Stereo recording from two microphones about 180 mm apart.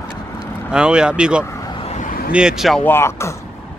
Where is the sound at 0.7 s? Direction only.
5° right (ahead or behind).